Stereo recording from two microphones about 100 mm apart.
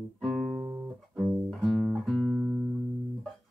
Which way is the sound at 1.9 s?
Centre (ahead or behind).